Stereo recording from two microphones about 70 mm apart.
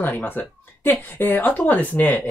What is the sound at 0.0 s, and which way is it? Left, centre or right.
Speech, left.